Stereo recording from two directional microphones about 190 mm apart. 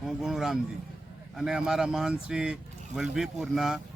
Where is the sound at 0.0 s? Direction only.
Centre (ahead or behind).